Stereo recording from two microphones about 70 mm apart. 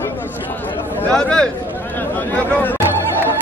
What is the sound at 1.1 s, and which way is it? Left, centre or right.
Speech, centre.